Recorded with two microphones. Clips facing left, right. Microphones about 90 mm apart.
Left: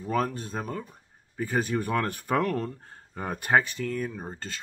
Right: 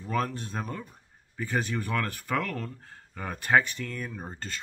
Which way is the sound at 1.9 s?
20° left (ahead or behind).